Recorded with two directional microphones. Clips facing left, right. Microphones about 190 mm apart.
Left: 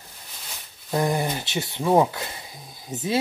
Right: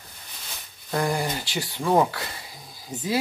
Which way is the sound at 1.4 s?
25° left (ahead or behind).